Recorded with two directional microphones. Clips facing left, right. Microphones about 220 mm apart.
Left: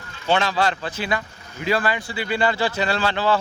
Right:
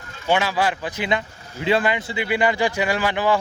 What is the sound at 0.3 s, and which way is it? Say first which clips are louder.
Speech: even; 10° right (ahead or behind).